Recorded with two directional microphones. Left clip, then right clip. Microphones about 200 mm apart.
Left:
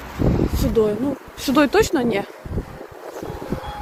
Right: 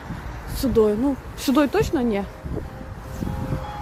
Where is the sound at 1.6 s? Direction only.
5° left (ahead or behind).